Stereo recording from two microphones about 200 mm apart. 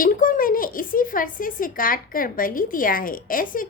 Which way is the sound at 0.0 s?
45° left (ahead or behind).